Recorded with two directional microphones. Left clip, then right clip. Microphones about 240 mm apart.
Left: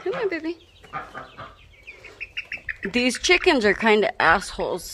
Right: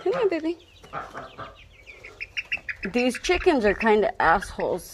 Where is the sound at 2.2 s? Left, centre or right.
Centre.